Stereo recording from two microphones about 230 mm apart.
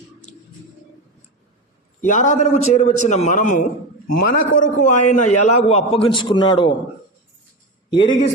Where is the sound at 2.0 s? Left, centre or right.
Left.